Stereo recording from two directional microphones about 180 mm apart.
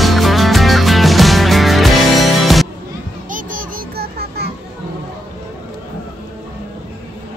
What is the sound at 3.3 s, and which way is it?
Music, 50° right (ahead or behind).